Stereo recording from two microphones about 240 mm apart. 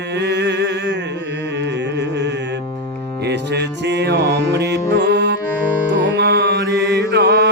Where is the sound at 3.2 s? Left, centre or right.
Right.